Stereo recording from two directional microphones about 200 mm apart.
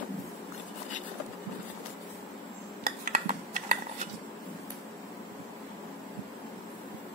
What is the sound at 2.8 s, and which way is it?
Cutlery, 50° right (ahead or behind).